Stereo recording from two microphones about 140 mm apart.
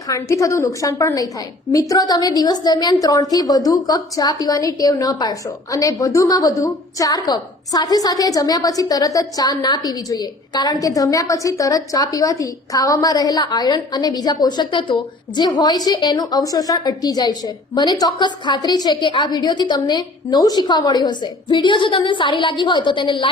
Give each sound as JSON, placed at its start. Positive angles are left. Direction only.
{"t": 0.1, "sound": "a woman's voice", "side_deg": 25}